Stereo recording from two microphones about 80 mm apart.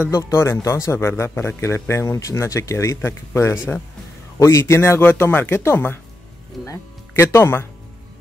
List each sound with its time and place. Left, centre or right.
0.1 s speech: left